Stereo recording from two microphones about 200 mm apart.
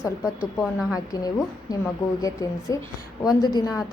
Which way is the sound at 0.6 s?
Centre (ahead or behind).